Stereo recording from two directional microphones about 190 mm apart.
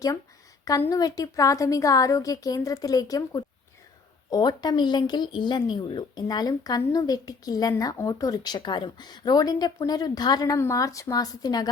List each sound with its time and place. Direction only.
0.6 s a woman's voice: 15° left (ahead or behind)